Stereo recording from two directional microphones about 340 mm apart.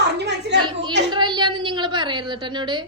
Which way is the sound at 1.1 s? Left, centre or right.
Centre.